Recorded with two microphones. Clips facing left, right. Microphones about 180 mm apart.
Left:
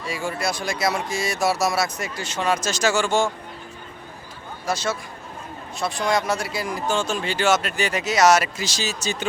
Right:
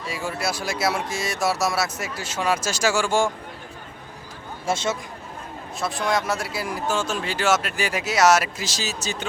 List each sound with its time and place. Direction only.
0.1 s speech: centre (ahead or behind)
4.6 s speech: 25° right (ahead or behind)
5.8 s speech: centre (ahead or behind)